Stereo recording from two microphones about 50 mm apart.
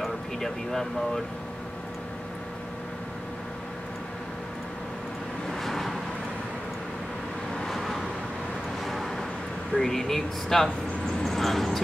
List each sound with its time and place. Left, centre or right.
0.4 s speech: centre
5.5 s vehicle: centre
7.6 s vehicle: centre
9.8 s speech: centre